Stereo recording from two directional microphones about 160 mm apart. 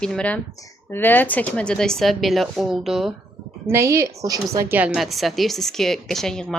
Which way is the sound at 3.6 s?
15° right (ahead or behind).